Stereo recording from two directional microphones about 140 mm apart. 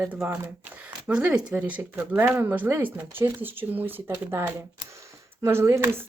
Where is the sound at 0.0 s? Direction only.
10° right (ahead or behind).